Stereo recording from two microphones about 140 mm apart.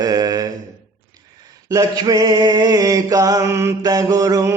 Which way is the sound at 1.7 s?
30° right (ahead or behind).